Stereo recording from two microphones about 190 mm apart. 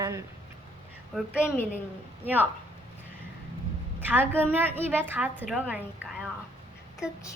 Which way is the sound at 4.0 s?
10° right (ahead or behind).